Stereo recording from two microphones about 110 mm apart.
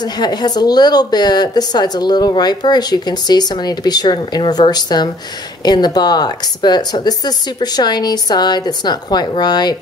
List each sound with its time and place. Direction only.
0.0 s a woman's voice: 40° left (ahead or behind)